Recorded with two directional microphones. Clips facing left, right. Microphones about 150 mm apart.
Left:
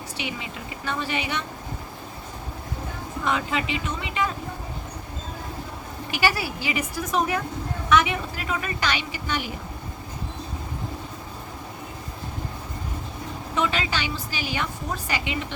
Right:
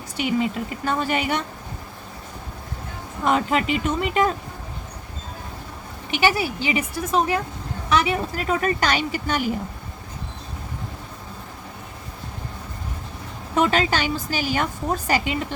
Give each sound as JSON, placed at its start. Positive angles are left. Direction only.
{"t": 0.9, "sound": "a woman's voice", "side_deg": -45}
{"t": 3.2, "sound": "a woman's voice", "side_deg": -45}
{"t": 6.1, "sound": "a woman's voice", "side_deg": -20}
{"t": 13.6, "sound": "a woman's voice", "side_deg": -45}